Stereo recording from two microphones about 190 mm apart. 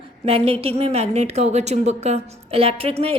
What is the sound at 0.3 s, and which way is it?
A woman's voice, 30° right (ahead or behind).